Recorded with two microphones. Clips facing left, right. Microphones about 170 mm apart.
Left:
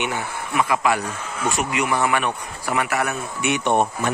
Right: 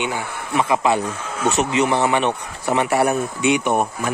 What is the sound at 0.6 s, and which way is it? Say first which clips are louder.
Speech: right 2 dB; 25° right (ahead or behind).